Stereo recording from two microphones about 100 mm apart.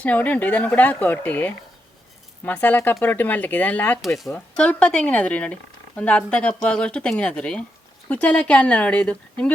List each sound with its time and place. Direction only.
0.0 s speech: 15° left (ahead or behind)
4.0 s speech: centre (ahead or behind)
4.5 s speech: 10° left (ahead or behind)